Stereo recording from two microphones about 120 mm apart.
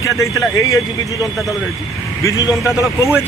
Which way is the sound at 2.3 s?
25° left (ahead or behind).